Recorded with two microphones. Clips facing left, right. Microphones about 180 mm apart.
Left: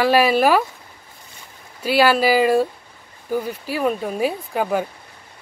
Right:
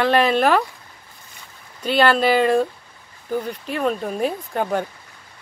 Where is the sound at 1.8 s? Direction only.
5° left (ahead or behind).